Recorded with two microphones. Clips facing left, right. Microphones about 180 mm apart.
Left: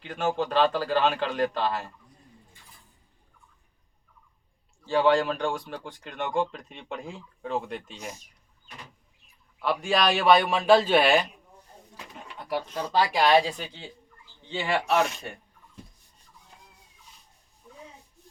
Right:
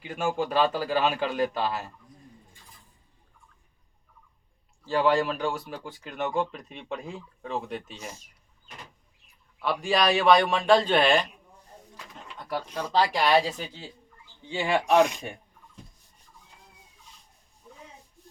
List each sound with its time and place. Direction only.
0.0 s a man's voice: 10° right (ahead or behind)
4.9 s a man's voice: centre (ahead or behind)
9.6 s a man's voice: centre (ahead or behind)
12.4 s a sound: 10° left (ahead or behind)
12.7 s speech: 10° left (ahead or behind)
13.2 s a man's voice: 5° right (ahead or behind)
14.5 s a man's voice: 15° right (ahead or behind)